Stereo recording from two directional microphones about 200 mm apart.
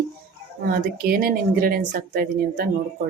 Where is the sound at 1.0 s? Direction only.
45° right (ahead or behind).